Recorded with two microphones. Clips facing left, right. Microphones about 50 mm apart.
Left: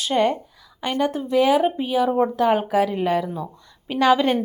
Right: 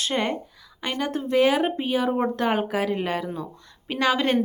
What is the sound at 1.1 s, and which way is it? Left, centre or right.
Speech, centre.